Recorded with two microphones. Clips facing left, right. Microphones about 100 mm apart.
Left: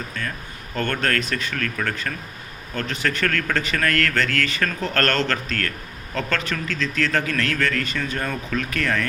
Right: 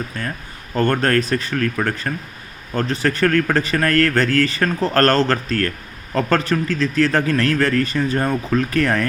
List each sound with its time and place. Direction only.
0.1 s speech: 35° right (ahead or behind)